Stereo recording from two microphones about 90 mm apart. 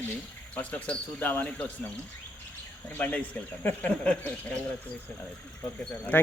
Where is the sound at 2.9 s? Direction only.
15° left (ahead or behind).